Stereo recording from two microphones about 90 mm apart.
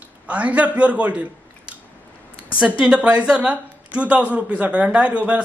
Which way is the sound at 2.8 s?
10° right (ahead or behind).